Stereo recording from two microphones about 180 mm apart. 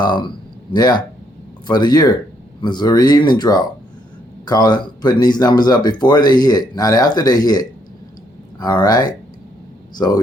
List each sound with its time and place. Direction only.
0.0 s speech: 25° left (ahead or behind)